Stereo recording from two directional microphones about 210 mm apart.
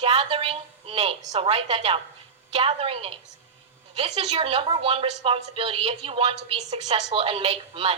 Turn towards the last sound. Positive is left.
turn(degrees=-25)  # may be behind; listen again after turning